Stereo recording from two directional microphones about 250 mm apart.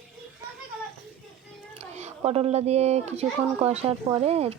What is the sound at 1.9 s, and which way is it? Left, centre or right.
Speech, right.